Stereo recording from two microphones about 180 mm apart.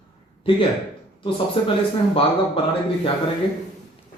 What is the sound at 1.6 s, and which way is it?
Speech, 30° left (ahead or behind).